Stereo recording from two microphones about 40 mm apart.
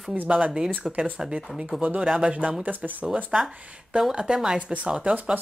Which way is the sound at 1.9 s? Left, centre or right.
Right.